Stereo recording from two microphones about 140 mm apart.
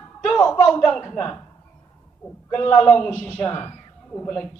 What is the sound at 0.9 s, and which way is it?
Speech, 20° left (ahead or behind).